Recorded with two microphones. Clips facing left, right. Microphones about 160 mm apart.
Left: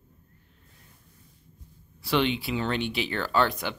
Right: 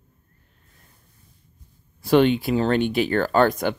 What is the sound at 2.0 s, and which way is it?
Speech, 45° right (ahead or behind).